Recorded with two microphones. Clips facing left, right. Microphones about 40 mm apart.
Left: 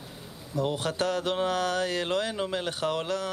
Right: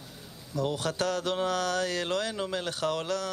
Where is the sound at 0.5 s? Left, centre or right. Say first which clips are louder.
Left 1 dB; left.